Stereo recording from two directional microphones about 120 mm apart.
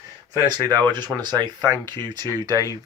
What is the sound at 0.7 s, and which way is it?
Speech, 35° right (ahead or behind).